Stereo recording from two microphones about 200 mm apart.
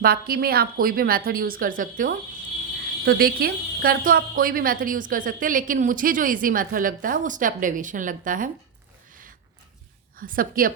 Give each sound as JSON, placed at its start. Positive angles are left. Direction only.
{"t": 0.0, "sound": "a woman's voice", "side_deg": -50}
{"t": 10.2, "sound": "a woman's voice", "side_deg": -45}